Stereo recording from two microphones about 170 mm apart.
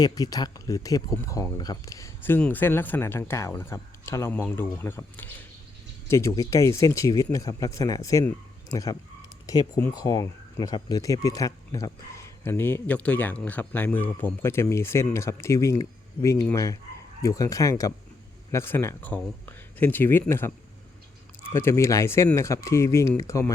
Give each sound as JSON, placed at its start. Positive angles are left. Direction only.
{"t": 0.0, "sound": "speech", "side_deg": 20}
{"t": 21.5, "sound": "speech", "side_deg": 15}